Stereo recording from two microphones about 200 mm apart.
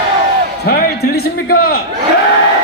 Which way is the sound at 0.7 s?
50° left (ahead or behind).